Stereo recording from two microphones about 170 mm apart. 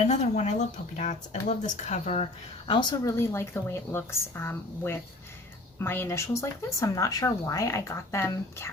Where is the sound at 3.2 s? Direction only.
15° left (ahead or behind).